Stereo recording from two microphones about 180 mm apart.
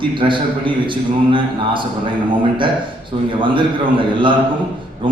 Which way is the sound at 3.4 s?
25° right (ahead or behind).